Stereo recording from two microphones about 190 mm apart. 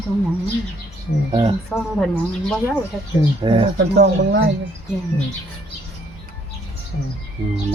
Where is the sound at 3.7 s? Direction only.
65° right (ahead or behind).